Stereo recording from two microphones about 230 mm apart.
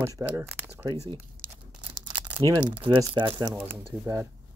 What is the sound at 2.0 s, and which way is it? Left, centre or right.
Speech, centre.